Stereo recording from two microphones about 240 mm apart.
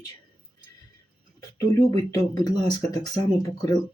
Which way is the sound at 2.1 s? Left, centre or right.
Centre.